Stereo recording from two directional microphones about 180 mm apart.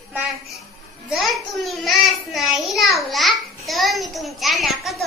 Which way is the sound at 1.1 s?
Centre (ahead or behind).